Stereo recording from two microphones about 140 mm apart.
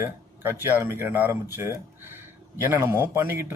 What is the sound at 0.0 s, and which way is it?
Speech, 15° right (ahead or behind).